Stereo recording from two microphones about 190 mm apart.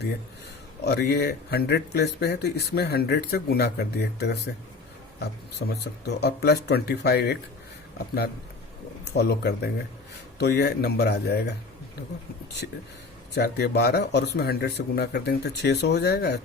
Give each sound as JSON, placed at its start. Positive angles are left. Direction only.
{"t": 0.9, "sound": "speech", "side_deg": 60}
{"t": 13.3, "sound": "speech", "side_deg": 60}